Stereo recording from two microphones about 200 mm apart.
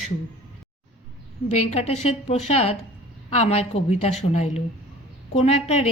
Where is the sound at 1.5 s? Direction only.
35° left (ahead or behind).